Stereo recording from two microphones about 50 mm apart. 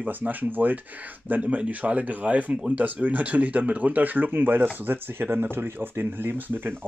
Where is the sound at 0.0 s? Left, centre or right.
Right.